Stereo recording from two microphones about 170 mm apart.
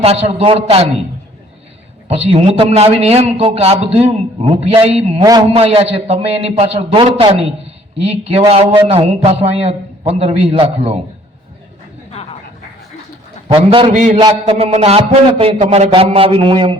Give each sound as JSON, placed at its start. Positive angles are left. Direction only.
{"t": 0.0, "sound": "a man's voice", "side_deg": -35}
{"t": 2.0, "sound": "a man's voice", "side_deg": -35}
{"t": 5.2, "sound": "a man's voice", "side_deg": -20}
{"t": 5.5, "sound": "a man's voice", "side_deg": -35}
{"t": 13.5, "sound": "a man's voice", "side_deg": -30}
{"t": 13.9, "sound": "a man's voice", "side_deg": -45}
{"t": 14.2, "sound": "a man's voice", "side_deg": -35}